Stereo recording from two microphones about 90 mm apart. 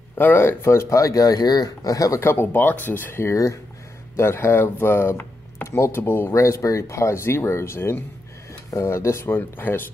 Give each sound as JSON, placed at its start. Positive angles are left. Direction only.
{"t": 0.2, "sound": "speech", "side_deg": 25}
{"t": 2.2, "sound": "speech", "side_deg": 25}